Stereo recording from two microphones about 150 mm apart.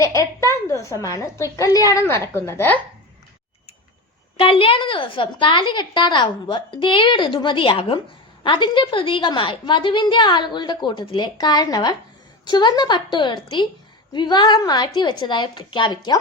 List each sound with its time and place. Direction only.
0.0 s a woman's voice: 20° left (ahead or behind)
4.4 s a woman's voice: 35° left (ahead or behind)